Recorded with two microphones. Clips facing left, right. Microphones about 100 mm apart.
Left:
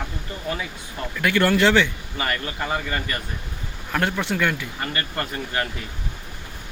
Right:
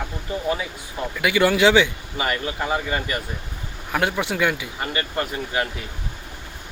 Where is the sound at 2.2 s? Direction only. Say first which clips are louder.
Right 2 dB; 15° right (ahead or behind).